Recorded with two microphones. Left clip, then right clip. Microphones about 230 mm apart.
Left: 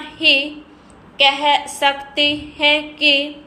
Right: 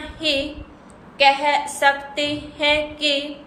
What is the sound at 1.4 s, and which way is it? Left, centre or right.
A woman's voice, centre.